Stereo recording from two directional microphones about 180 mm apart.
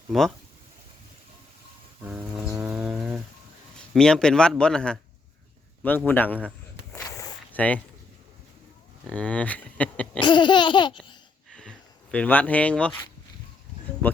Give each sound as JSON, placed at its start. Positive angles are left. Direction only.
{"t": 0.1, "sound": "speech", "side_deg": 0}
{"t": 2.0, "sound": "a sound", "side_deg": -5}
{"t": 2.5, "sound": "chainsaw", "side_deg": -15}
{"t": 3.9, "sound": "speech", "side_deg": 5}
{"t": 6.1, "sound": "speech", "side_deg": 10}
{"t": 6.9, "sound": "walk", "side_deg": 20}
{"t": 7.5, "sound": "speech", "side_deg": 10}
{"t": 9.0, "sound": "speech", "side_deg": 5}
{"t": 10.2, "sound": "babbling", "side_deg": 25}
{"t": 11.5, "sound": "a sound", "side_deg": 5}